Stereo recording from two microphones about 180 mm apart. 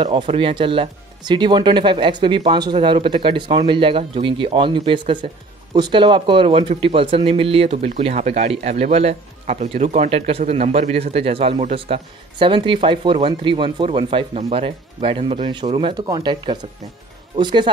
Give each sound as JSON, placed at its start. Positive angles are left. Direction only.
{"t": 0.0, "sound": "speech", "side_deg": -30}